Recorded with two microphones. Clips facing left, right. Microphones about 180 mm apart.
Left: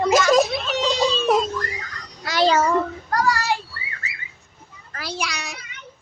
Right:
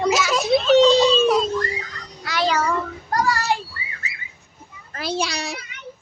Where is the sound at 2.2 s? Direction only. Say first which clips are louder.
Left 3 dB; 45° left (ahead or behind).